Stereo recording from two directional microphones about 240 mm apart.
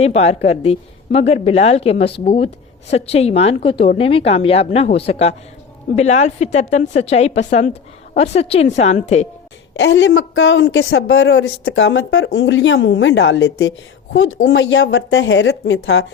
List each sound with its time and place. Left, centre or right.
0.0 s a woman's voice: left
9.7 s a man's voice: left